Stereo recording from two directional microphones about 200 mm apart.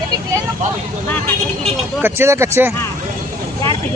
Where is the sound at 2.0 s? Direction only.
10° right (ahead or behind).